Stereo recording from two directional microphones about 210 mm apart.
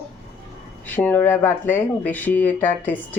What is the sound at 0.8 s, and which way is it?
Speech, 10° left (ahead or behind).